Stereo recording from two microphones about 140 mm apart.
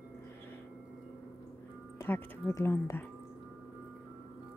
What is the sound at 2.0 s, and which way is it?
A woman's voice, 15° left (ahead or behind).